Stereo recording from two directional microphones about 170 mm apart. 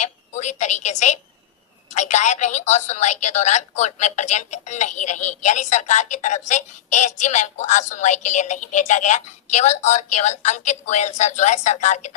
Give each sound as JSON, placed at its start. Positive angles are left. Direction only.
{"t": 0.0, "sound": "a woman's voice", "side_deg": 45}